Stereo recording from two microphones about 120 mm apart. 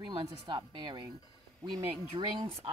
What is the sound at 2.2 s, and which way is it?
Speech, 35° right (ahead or behind).